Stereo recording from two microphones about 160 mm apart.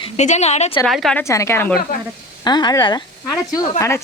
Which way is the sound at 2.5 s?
25° left (ahead or behind).